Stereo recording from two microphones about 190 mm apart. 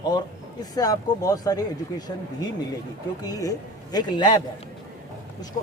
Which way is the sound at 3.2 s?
20° left (ahead or behind).